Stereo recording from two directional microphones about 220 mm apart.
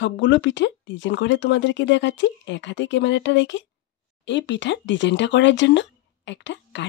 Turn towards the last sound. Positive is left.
turn(degrees=55)  # may be behind; listen again after turning